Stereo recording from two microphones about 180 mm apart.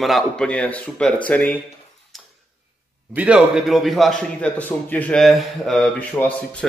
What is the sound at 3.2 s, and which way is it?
A man's voice, 5° right (ahead or behind).